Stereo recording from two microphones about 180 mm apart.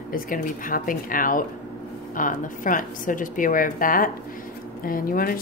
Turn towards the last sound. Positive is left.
turn(degrees=50)  # may be behind; listen again after turning